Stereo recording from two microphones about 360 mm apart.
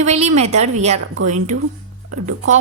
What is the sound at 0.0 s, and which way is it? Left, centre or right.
Speech, centre.